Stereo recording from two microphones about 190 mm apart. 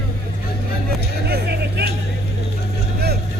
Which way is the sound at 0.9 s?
55° right (ahead or behind).